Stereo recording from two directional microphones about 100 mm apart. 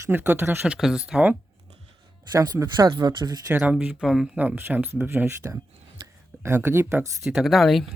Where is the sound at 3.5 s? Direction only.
10° right (ahead or behind).